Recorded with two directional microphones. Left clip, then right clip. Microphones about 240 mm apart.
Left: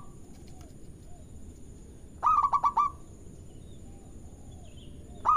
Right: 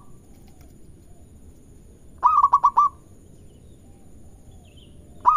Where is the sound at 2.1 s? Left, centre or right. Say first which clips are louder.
Right 8 dB; right.